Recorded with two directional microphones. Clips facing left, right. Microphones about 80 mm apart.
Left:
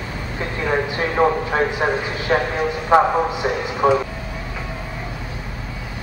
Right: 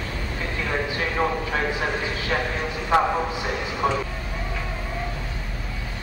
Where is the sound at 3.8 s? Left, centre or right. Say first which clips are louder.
Left 8 dB; left.